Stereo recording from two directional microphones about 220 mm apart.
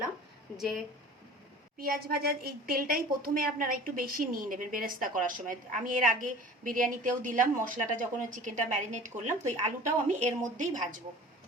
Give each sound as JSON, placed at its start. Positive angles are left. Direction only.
{"t": 0.5, "sound": "speech", "side_deg": 0}
{"t": 1.8, "sound": "a woman's voice", "side_deg": -45}